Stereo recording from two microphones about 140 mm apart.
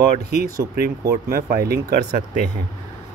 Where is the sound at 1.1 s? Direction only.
90° right.